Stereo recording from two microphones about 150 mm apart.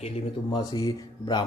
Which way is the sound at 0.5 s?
30° left (ahead or behind).